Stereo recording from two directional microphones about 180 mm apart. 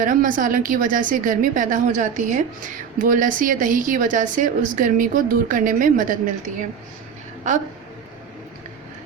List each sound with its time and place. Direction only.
0.0 s a woman's voice: 50° right (ahead or behind)